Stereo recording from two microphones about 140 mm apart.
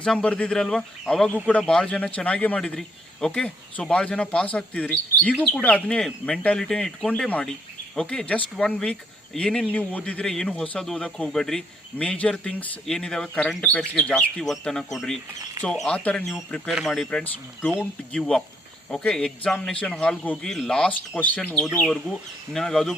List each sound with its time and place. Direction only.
0.0 s a man's voice: 5° left (ahead or behind)